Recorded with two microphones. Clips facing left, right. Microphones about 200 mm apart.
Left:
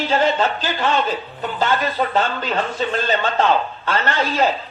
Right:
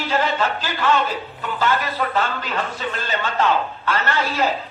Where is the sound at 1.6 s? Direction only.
25° left (ahead or behind).